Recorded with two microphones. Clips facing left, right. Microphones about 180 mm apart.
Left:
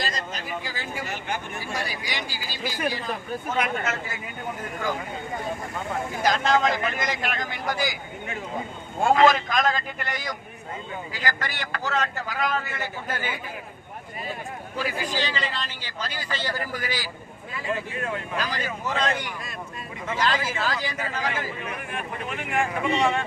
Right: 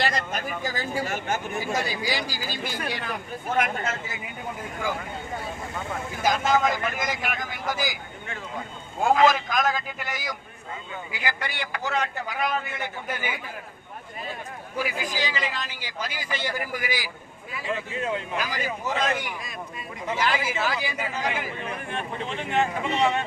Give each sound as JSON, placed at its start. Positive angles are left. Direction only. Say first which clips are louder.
{"t": 0.0, "sound": "speech", "louder": "right 4 dB", "side_deg": -65}
{"t": 0.6, "sound": "speech", "louder": "right 5 dB", "side_deg": -45}
{"t": 1.5, "sound": "speech", "louder": "right 4 dB", "side_deg": -20}
{"t": 6.2, "sound": "speech", "louder": "even", "side_deg": -5}
{"t": 9.0, "sound": "a man's voice", "louder": "left 1 dB", "side_deg": 0}
{"t": 14.8, "sound": "a man's voice", "louder": "even", "side_deg": -15}
{"t": 21.6, "sound": "speech", "louder": "right 1 dB", "side_deg": -30}